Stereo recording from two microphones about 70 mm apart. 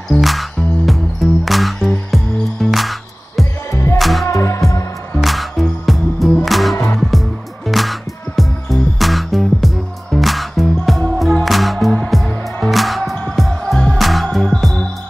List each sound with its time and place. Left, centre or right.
0.1 s music: centre
3.7 s music: left
4.0 s music: centre
4.3 s music: left
5.2 s music: centre